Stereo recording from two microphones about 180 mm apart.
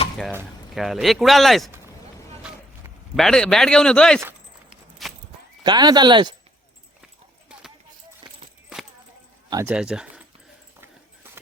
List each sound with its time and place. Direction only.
0.7 s speech: centre (ahead or behind)
3.2 s speech: 5° left (ahead or behind)
4.2 s a sound: 10° right (ahead or behind)
5.0 s horse: centre (ahead or behind)
5.6 s speech: 25° right (ahead or behind)
7.0 s clip-clop: 5° right (ahead or behind)
8.2 s a sound: 25° right (ahead or behind)
9.5 s speech: 15° right (ahead or behind)
9.7 s speech: 5° right (ahead or behind)